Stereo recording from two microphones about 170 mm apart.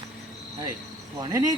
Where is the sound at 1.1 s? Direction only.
25° right (ahead or behind).